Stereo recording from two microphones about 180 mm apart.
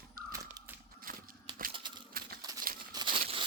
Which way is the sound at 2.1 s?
55° right (ahead or behind).